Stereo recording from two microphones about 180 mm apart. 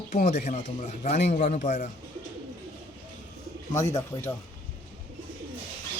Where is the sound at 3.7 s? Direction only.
40° left (ahead or behind).